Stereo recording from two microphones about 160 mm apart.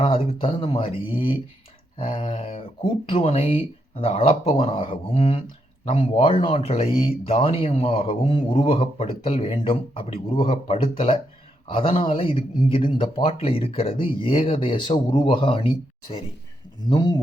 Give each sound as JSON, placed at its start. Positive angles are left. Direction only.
{"t": 0.0, "sound": "speech", "side_deg": 35}